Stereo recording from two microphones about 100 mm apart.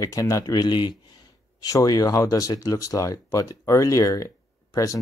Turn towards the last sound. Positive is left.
turn(degrees=35)  # may be behind; listen again after turning